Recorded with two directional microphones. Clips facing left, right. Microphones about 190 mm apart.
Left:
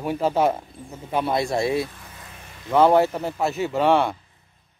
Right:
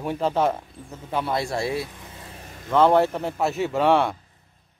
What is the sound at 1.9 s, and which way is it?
Vehicle, 20° right (ahead or behind).